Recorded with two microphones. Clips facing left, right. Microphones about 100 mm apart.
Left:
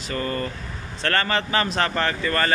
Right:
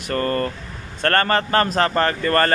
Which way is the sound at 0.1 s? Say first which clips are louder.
Right 5 dB; 60° right (ahead or behind).